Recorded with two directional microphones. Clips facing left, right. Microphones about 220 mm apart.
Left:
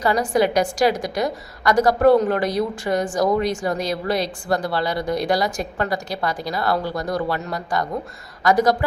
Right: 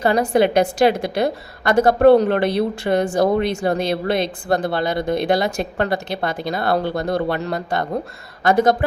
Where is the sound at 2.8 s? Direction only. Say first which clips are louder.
Right 3 dB; 40° right (ahead or behind).